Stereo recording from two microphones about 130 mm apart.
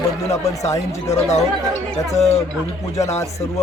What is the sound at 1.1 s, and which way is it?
Speech, 60° left (ahead or behind).